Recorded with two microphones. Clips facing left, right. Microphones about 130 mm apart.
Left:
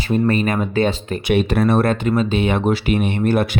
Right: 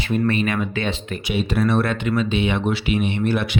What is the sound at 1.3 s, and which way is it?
Speech, 55° left (ahead or behind).